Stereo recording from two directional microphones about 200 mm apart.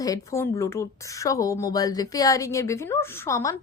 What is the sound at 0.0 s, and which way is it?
Speech, 15° left (ahead or behind).